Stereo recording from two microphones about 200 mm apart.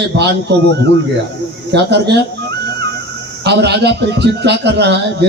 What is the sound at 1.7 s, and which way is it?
Speech, 55° right (ahead or behind).